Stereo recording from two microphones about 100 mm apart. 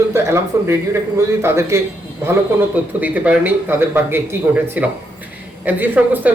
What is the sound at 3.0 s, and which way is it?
Speech, 15° right (ahead or behind).